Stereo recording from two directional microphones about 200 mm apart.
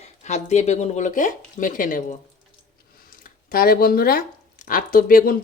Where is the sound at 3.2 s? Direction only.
45° left (ahead or behind).